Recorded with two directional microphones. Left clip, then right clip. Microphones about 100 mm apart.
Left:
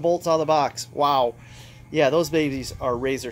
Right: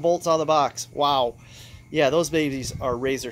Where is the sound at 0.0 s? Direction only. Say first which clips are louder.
Even; 30° right (ahead or behind).